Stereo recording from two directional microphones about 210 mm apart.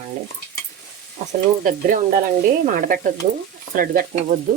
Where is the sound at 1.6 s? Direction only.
40° right (ahead or behind).